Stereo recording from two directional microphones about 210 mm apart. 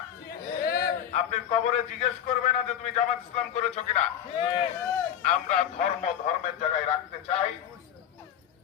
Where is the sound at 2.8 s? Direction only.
30° left (ahead or behind).